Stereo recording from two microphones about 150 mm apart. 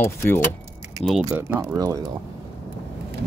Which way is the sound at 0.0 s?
15° left (ahead or behind).